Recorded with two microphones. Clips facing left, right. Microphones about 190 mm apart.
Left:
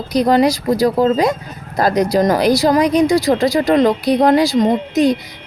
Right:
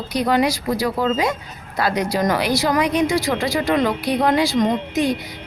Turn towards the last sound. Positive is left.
turn(degrees=40)  # may be behind; listen again after turning